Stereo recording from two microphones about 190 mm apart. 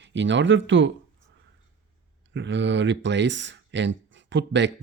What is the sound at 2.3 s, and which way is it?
Speech, 70° right (ahead or behind).